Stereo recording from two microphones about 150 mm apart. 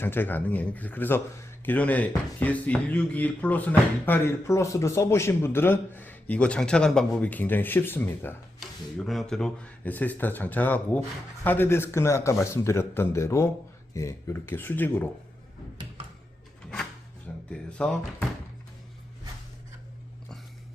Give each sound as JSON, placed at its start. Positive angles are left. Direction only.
{"t": 0.0, "sound": "speech", "side_deg": 15}
{"t": 8.5, "sound": "speech", "side_deg": 0}
{"t": 17.5, "sound": "speech", "side_deg": 5}